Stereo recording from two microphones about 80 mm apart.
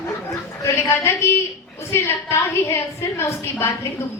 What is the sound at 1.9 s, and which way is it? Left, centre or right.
A woman's voice, left.